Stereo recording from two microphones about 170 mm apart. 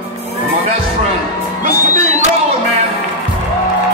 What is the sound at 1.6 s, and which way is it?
Music, 50° right (ahead or behind).